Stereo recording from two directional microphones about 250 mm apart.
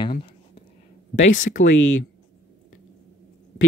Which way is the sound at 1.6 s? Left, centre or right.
Left.